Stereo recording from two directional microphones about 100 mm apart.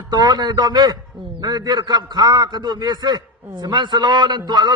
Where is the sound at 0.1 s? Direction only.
45° right (ahead or behind).